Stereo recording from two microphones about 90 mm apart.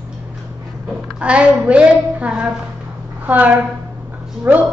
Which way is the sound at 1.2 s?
15° right (ahead or behind).